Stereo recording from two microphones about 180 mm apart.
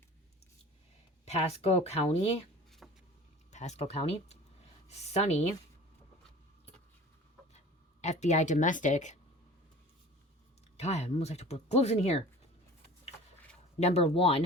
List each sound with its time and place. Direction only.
1.2 s speech: 35° left (ahead or behind)
2.8 s vehicle: centre (ahead or behind)
3.5 s speech: 40° left (ahead or behind)
8.0 s speech: 40° left (ahead or behind)
10.8 s speech: 35° left (ahead or behind)
13.7 s speech: 35° left (ahead or behind)